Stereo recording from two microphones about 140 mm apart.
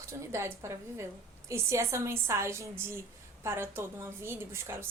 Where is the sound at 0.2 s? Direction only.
20° right (ahead or behind).